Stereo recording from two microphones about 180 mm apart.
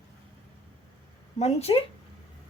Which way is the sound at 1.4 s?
35° left (ahead or behind).